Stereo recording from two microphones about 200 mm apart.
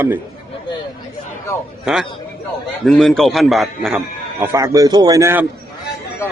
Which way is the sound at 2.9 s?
Centre (ahead or behind).